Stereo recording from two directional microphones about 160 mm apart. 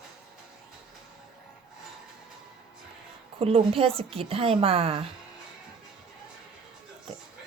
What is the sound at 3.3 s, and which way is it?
A woman's voice, 35° right (ahead or behind).